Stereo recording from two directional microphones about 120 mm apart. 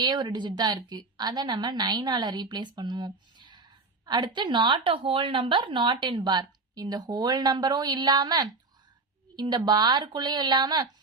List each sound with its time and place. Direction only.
0.0 s a woman's voice: 35° right (ahead or behind)